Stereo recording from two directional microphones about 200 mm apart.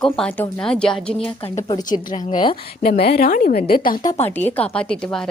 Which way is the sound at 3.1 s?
45° left (ahead or behind).